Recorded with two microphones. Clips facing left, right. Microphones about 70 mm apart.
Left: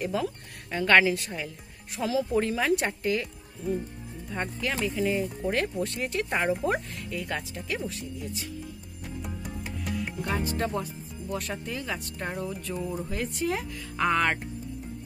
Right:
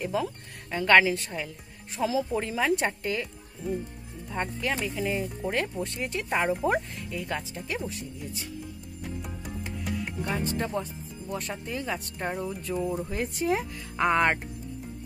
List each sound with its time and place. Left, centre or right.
0.0 s speech: centre
9.2 s music: centre
12.4 s speech: centre
12.9 s speech: centre